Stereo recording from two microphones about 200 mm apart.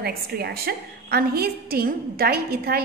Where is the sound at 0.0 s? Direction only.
55° right (ahead or behind).